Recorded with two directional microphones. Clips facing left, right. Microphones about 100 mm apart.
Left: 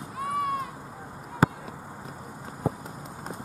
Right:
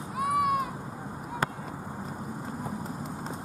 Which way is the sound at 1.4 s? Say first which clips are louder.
Left 8 dB; 5° left (ahead or behind).